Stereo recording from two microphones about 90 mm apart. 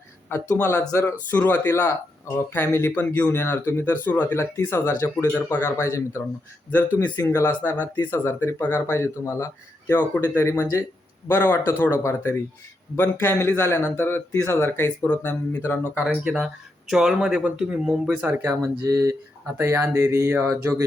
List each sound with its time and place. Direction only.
0.4 s speech: 15° left (ahead or behind)
1.7 s speech: 35° left (ahead or behind)
6.7 s speech: 20° left (ahead or behind)
7.2 s speech: 30° left (ahead or behind)
15.0 s speech: 15° left (ahead or behind)
16.0 s speech: 5° right (ahead or behind)
18.6 s speech: 35° right (ahead or behind)